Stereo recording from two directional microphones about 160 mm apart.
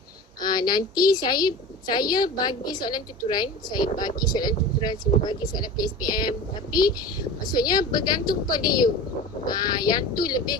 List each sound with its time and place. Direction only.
0.4 s a woman's voice: 25° left (ahead or behind)